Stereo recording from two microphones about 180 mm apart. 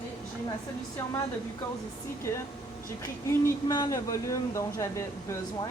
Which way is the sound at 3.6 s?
20° left (ahead or behind).